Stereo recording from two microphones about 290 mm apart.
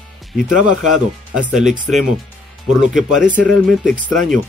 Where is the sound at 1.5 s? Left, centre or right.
Centre.